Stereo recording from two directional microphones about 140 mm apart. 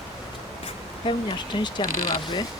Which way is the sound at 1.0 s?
40° left (ahead or behind).